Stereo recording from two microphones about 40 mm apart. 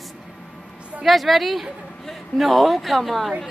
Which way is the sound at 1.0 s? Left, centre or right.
Centre.